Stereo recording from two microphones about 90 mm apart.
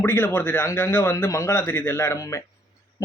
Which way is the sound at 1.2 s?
35° left (ahead or behind).